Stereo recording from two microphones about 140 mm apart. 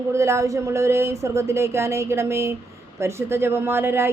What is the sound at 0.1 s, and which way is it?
Speech, 20° right (ahead or behind).